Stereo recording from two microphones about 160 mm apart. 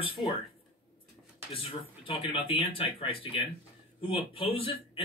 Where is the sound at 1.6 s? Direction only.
35° left (ahead or behind).